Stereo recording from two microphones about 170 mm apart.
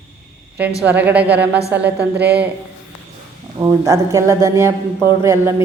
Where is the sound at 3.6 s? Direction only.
15° right (ahead or behind).